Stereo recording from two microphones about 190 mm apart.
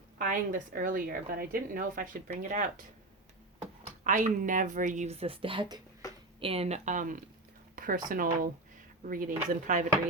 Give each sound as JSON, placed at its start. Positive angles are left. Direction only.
{"t": 0.2, "sound": "a woman's voice", "side_deg": -45}
{"t": 4.0, "sound": "a woman's voice", "side_deg": -40}